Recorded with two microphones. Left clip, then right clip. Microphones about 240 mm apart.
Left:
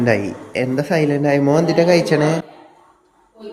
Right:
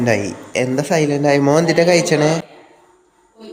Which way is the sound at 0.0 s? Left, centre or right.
Centre.